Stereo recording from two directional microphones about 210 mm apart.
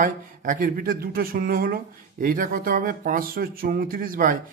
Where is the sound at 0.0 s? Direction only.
40° right (ahead or behind).